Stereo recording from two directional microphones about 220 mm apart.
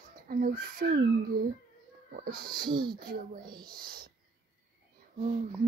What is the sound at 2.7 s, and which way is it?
Speech, 20° right (ahead or behind).